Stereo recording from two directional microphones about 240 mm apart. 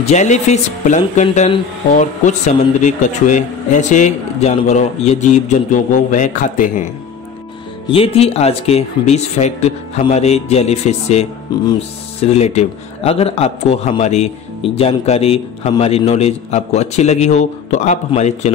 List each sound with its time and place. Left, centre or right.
0.0 s speech: left
7.9 s speech: left